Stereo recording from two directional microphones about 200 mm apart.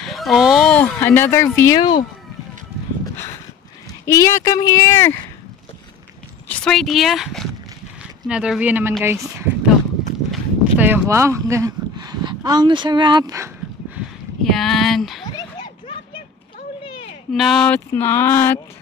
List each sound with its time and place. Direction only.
0.0 s speech: centre (ahead or behind); by 2.0 s 20° left (ahead or behind)
4.0 s speech: 15° left (ahead or behind)
6.5 s speech: 5° left (ahead or behind); by 9.5 s 15° right (ahead or behind)
10.3 s a sound: 10° right (ahead or behind)
15.3 s a sound: 25° left (ahead or behind)
17.3 s speech: centre (ahead or behind)